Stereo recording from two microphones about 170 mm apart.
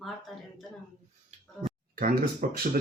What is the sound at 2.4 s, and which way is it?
Speech, 50° right (ahead or behind).